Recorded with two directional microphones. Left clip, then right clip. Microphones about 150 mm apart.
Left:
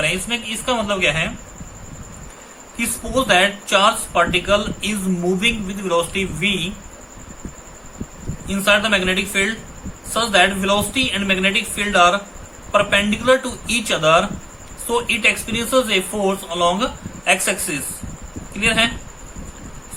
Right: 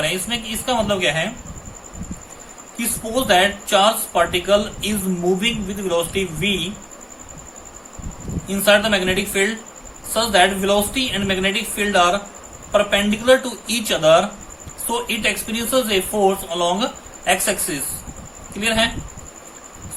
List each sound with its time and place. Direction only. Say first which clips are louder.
0.0 s speech: left 1 dB; 20° left (ahead or behind)
3.1 s speech: even; 20° left (ahead or behind)
8.4 s speech: right 1 dB; 20° left (ahead or behind)